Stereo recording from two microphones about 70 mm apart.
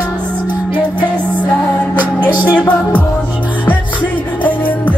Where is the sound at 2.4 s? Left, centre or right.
Centre.